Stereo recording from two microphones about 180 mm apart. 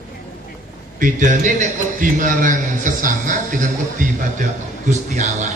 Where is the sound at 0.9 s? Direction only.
45° right (ahead or behind).